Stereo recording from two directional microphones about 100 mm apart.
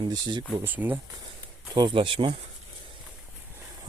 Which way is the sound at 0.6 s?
20° right (ahead or behind).